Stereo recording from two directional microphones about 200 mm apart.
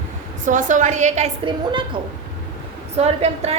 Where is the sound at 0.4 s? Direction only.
40° right (ahead or behind).